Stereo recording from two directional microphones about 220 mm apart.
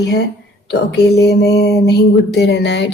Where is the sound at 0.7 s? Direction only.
50° left (ahead or behind).